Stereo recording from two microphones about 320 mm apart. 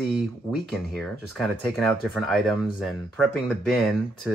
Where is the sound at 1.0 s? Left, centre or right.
Centre.